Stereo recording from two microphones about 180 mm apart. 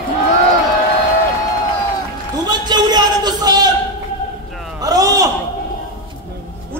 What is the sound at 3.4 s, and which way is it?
Speech, 20° right (ahead or behind).